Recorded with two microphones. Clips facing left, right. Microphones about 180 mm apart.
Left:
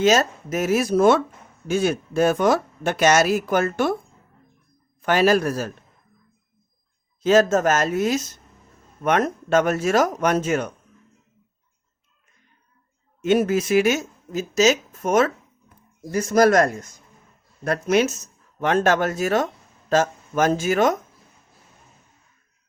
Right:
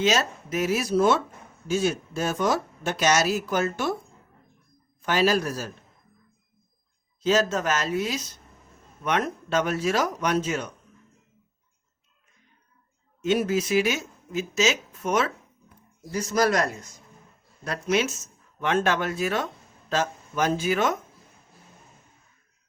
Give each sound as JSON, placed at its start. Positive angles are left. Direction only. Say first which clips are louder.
{"t": 0.0, "sound": "speech", "louder": "left 6 dB", "side_deg": 45}
{"t": 5.0, "sound": "speech", "louder": "left 5 dB", "side_deg": 55}
{"t": 7.2, "sound": "speech", "louder": "left 6 dB", "side_deg": 50}
{"t": 13.2, "sound": "speech", "louder": "left 4 dB", "side_deg": 55}